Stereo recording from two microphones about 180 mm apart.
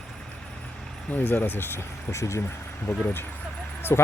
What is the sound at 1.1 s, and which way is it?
Speech, 10° left (ahead or behind).